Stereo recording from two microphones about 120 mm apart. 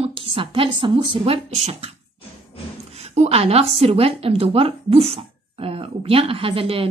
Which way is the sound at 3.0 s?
65° right (ahead or behind).